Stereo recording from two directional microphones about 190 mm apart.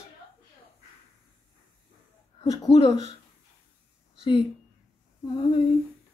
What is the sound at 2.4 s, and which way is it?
Speech, 20° left (ahead or behind).